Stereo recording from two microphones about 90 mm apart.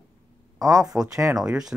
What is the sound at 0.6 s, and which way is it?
Speech, 40° right (ahead or behind).